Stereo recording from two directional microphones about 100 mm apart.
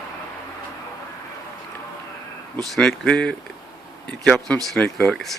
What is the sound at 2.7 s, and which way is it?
Speech, 5° left (ahead or behind).